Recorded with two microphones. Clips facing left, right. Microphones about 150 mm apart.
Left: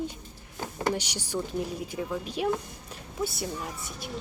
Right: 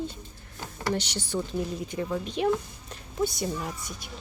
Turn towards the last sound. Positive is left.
turn(degrees=0)  # may be behind; listen again after turning